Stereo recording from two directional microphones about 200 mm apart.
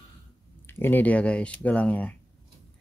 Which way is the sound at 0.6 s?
10° left (ahead or behind).